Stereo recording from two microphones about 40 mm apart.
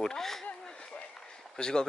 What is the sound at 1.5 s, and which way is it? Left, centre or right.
Speech, centre.